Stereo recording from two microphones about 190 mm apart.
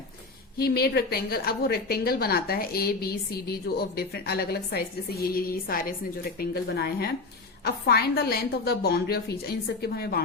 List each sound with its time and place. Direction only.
0.6 s a woman's voice: 55° left (ahead or behind)